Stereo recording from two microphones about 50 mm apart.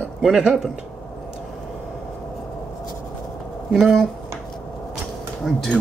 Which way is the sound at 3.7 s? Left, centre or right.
Centre.